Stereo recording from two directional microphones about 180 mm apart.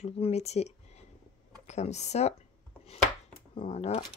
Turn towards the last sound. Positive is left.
turn(degrees=35)  # may be behind; listen again after turning